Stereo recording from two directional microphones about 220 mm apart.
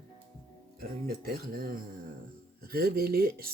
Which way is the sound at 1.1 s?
45° right (ahead or behind).